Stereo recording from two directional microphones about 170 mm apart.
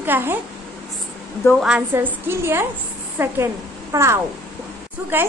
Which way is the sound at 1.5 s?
5° right (ahead or behind).